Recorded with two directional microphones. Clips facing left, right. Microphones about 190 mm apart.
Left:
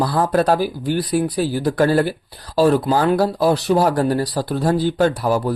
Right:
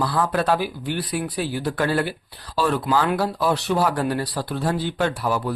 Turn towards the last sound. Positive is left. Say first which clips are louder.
# left 6 dB
turn(degrees=40)  # may be behind; listen again after turning